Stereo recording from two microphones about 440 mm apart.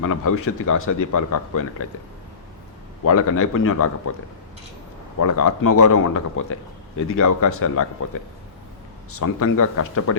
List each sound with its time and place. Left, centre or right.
0.0 s a man's voice: left
3.0 s a man's voice: left
5.2 s a man's voice: left
9.1 s a man's voice: left